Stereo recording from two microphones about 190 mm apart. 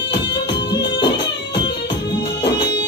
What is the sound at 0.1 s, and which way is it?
Music, 25° left (ahead or behind).